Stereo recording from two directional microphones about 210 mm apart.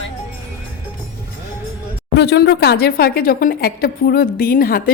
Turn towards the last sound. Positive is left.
turn(degrees=45)  # may be behind; listen again after turning